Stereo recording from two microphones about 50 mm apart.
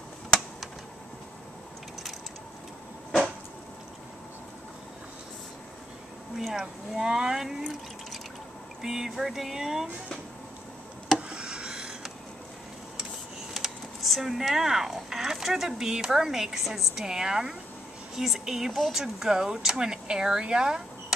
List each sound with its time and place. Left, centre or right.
6.3 s speech: centre
8.8 s speech: centre
11.1 s a sound: centre
13.5 s speech: centre